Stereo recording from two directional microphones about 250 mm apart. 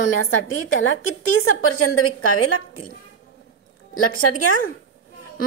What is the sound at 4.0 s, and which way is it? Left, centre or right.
Speech, left.